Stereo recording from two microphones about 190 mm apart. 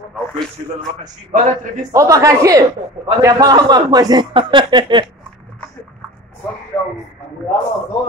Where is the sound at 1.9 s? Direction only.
15° right (ahead or behind).